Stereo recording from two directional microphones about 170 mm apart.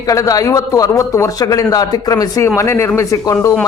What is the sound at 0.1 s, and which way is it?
A man's voice, 20° left (ahead or behind).